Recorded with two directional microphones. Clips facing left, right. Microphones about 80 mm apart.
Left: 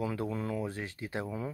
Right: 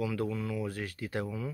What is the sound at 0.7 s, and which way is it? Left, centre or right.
Speech, left.